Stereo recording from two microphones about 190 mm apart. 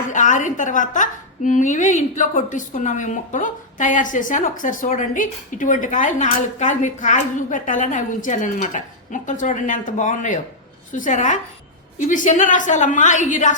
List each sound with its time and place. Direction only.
0.1 s a woman's voice: 40° left (ahead or behind)